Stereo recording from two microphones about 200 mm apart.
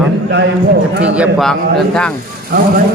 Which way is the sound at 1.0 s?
5° right (ahead or behind).